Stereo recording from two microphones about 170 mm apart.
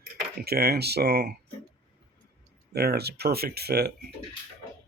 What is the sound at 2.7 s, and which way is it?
Speech, 70° right (ahead or behind).